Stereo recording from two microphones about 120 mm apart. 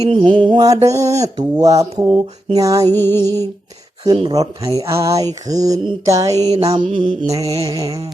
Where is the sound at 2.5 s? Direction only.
30° right (ahead or behind).